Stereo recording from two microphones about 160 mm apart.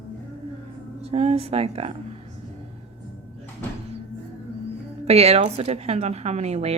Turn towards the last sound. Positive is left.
turn(degrees=-40)  # may be behind; listen again after turning